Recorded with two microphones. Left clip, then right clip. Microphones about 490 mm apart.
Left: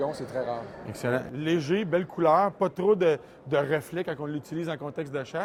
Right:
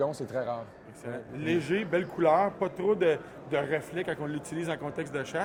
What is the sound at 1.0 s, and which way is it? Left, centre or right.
Speech, left.